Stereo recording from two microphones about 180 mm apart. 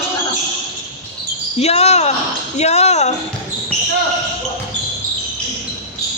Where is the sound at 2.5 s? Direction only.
40° left (ahead or behind).